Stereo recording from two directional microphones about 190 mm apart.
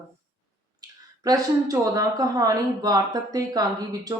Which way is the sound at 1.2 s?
20° right (ahead or behind).